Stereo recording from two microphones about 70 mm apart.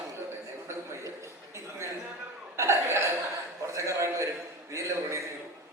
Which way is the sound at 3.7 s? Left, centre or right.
Right.